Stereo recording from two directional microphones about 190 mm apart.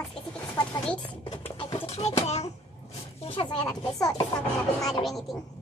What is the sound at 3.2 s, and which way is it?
Speech, 25° left (ahead or behind).